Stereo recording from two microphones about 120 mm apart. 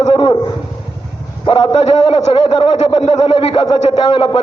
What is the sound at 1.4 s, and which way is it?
A man's voice, 45° left (ahead or behind).